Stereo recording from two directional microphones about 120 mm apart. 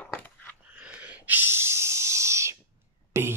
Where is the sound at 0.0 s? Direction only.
10° left (ahead or behind).